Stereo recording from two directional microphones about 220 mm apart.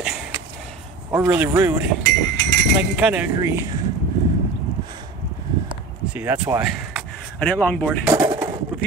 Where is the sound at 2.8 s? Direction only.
5° right (ahead or behind).